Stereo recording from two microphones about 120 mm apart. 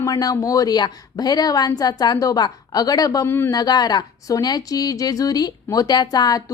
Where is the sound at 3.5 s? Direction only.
35° left (ahead or behind).